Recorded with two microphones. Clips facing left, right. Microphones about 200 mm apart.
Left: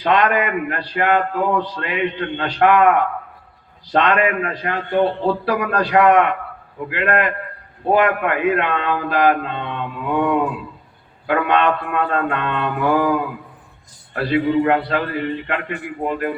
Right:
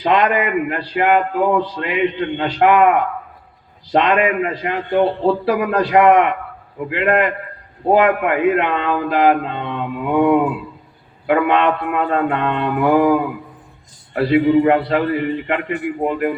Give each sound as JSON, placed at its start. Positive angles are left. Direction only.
{"t": 0.0, "sound": "a man's voice", "side_deg": -20}
{"t": 3.9, "sound": "a man's voice", "side_deg": -20}